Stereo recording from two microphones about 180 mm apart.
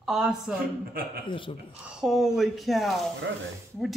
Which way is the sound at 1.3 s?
30° left (ahead or behind).